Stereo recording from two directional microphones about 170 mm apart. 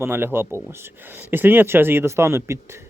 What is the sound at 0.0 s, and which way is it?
Speech, 15° right (ahead or behind).